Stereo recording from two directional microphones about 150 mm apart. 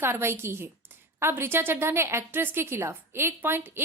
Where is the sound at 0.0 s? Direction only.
15° right (ahead or behind).